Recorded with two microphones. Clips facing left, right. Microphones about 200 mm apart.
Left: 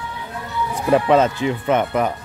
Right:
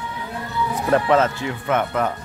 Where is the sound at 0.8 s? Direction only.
15° left (ahead or behind).